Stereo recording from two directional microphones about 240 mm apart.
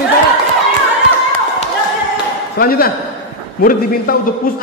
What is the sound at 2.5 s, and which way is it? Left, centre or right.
A man's voice, left.